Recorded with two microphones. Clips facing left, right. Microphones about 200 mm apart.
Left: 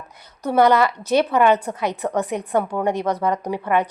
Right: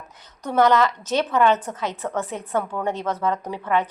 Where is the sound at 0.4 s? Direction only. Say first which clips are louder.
Left 2 dB; 10° left (ahead or behind).